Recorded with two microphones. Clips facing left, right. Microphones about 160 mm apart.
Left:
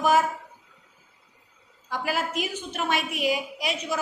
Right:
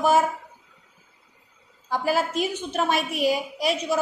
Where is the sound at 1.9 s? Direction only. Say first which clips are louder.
Right 5 dB; 35° right (ahead or behind).